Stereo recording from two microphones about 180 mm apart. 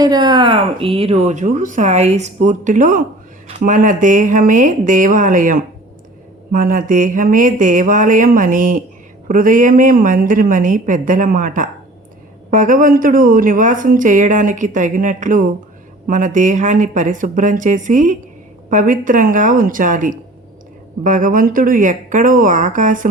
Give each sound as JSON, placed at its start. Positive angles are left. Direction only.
{"t": 0.0, "sound": "a woman's voice", "side_deg": -25}